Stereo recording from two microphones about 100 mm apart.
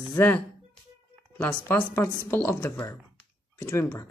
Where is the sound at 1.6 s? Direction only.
20° left (ahead or behind).